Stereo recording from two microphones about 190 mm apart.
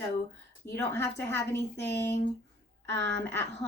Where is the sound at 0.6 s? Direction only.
10° left (ahead or behind).